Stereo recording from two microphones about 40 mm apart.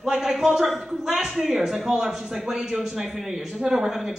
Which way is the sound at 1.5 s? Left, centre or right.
Centre.